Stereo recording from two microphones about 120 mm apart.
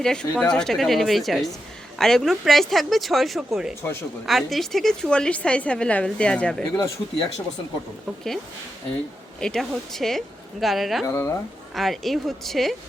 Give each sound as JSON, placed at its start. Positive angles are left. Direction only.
{"t": 0.0, "sound": "a woman's voice", "side_deg": 5}
{"t": 6.7, "sound": "speech", "side_deg": 30}
{"t": 9.4, "sound": "a woman's voice", "side_deg": 5}
{"t": 11.0, "sound": "speech", "side_deg": 25}
{"t": 11.7, "sound": "a woman's voice", "side_deg": 0}